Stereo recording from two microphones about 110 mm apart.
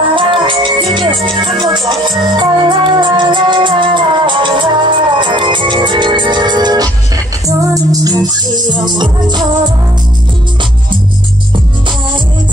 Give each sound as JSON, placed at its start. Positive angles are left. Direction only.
{"t": 0.1, "sound": "music", "side_deg": -50}